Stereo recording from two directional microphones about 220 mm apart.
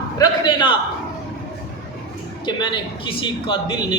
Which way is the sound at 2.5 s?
20° left (ahead or behind).